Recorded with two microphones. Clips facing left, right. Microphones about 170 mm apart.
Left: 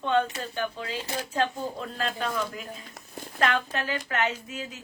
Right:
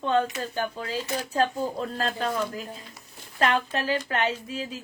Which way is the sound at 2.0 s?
40° right (ahead or behind).